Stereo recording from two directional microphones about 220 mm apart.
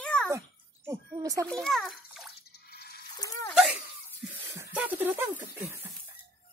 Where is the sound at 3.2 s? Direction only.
15° left (ahead or behind).